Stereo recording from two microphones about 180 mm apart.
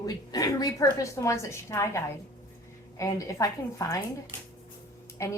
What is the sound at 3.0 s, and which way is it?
Speech, 20° left (ahead or behind).